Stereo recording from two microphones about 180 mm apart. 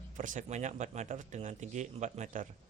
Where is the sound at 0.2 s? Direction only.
45° right (ahead or behind).